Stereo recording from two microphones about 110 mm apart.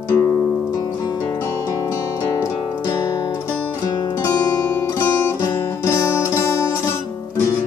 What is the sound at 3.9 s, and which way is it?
Music, 40° left (ahead or behind).